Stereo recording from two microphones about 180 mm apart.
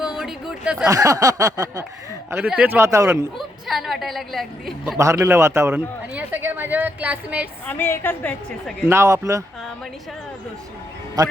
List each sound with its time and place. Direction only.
0.0 s a sound: 5° right (ahead or behind)
0.9 s a sound: 20° right (ahead or behind)
2.3 s a man's voice: 5° right (ahead or behind)
3.3 s a woman's voice: centre (ahead or behind)
4.9 s a man's voice: 15° right (ahead or behind)
7.7 s a woman's voice: 10° left (ahead or behind)
8.9 s a man's voice: 15° right (ahead or behind)